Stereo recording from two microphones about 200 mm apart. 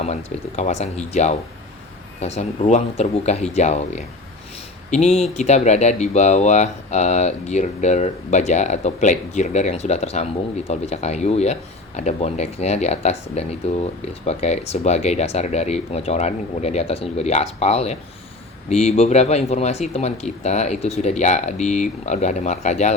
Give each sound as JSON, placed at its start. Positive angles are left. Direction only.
{"t": 0.0, "sound": "speech", "side_deg": 35}